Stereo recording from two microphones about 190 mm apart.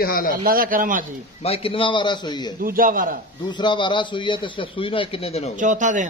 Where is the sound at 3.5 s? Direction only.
25° left (ahead or behind).